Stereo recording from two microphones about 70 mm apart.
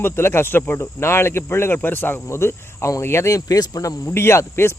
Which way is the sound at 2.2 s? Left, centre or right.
Left.